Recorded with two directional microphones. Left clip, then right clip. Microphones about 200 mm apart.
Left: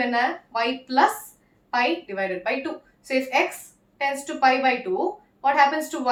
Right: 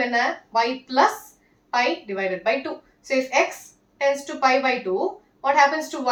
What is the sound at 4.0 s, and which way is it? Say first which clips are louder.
A woman's voice: right 1 dB; 20° left (ahead or behind).